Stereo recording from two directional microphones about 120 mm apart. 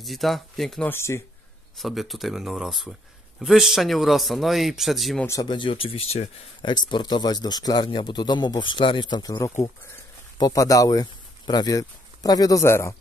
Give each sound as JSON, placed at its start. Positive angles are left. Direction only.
{"t": 0.0, "sound": "a man's voice", "side_deg": 0}
{"t": 0.8, "sound": "speech", "side_deg": 20}
{"t": 1.8, "sound": "a man's voice", "side_deg": 0}
{"t": 5.2, "sound": "speech", "side_deg": 25}
{"t": 5.5, "sound": "speech", "side_deg": 45}
{"t": 6.6, "sound": "speech", "side_deg": 40}